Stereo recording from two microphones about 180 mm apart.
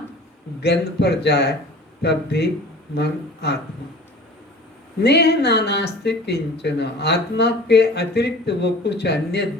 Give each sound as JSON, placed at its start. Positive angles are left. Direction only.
{"t": 0.6, "sound": "speech", "side_deg": 65}
{"t": 5.0, "sound": "speech", "side_deg": 65}